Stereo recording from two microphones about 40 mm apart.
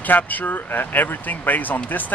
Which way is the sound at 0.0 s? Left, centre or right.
Left.